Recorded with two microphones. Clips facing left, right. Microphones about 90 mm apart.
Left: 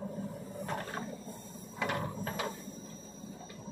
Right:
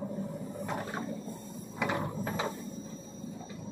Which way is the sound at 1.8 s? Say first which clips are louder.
Right 3 dB; 15° right (ahead or behind).